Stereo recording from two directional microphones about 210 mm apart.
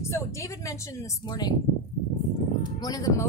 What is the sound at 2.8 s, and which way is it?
Speech, 15° left (ahead or behind).